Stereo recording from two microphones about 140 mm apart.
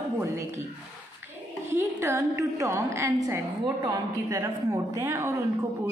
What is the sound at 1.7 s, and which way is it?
A woman's voice, 20° right (ahead or behind).